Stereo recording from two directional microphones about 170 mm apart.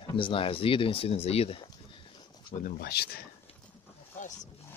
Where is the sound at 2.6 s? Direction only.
70° left (ahead or behind).